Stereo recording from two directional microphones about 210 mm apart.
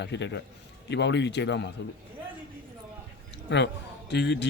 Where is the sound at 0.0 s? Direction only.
55° left (ahead or behind).